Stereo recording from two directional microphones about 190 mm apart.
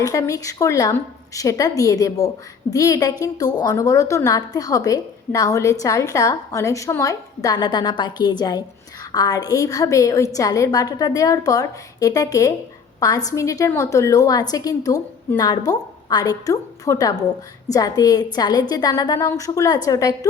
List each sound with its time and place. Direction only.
0.0 s a woman's voice: 20° left (ahead or behind)